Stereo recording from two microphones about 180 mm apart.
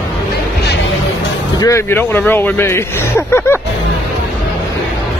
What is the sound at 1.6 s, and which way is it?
Speech, 15° left (ahead or behind).